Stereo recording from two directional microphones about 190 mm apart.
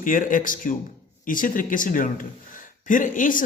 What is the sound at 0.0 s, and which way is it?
Speech, 45° left (ahead or behind).